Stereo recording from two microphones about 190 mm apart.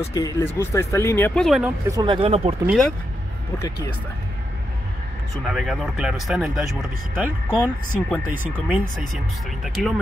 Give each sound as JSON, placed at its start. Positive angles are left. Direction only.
{"t": 0.1, "sound": "speech", "side_deg": 20}
{"t": 1.9, "sound": "speech", "side_deg": -20}
{"t": 2.6, "sound": "speech", "side_deg": -5}
{"t": 3.5, "sound": "speech", "side_deg": 20}
{"t": 5.4, "sound": "speech", "side_deg": 0}
{"t": 8.9, "sound": "speech", "side_deg": 0}